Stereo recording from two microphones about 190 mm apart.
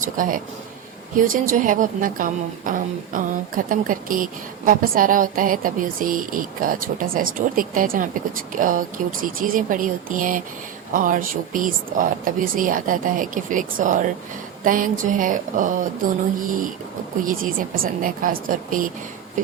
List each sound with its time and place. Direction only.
0.0 s a woman's voice: 45° right (ahead or behind)